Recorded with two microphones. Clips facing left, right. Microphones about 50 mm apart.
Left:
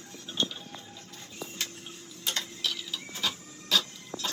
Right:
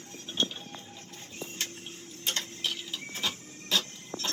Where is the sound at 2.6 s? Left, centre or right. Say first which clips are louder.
Even; right.